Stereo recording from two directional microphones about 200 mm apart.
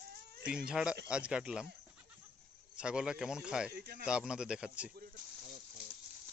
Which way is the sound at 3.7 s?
50° right (ahead or behind).